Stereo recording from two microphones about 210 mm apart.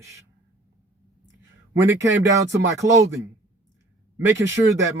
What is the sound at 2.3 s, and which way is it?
Speech, 15° right (ahead or behind).